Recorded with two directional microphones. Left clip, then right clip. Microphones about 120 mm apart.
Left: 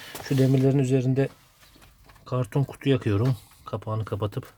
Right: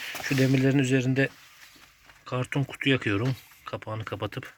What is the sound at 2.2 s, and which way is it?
Fowl, 40° left (ahead or behind).